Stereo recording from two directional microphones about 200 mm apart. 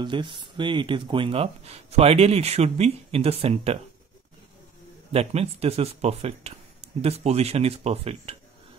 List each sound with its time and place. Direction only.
0.0 s speech: 25° right (ahead or behind)
5.1 s speech: 30° right (ahead or behind)